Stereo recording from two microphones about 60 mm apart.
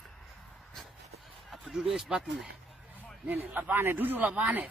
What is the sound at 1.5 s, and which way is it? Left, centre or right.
Speech, centre.